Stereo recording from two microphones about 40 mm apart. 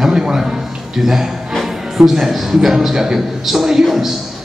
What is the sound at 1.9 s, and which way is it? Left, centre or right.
A man's voice, centre.